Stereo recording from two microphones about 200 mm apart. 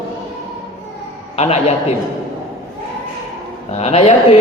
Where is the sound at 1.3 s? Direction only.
30° left (ahead or behind).